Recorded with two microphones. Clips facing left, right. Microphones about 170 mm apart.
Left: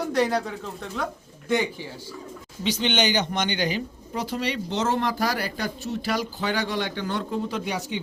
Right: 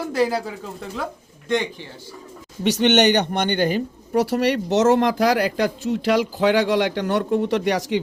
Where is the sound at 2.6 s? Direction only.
65° right (ahead or behind).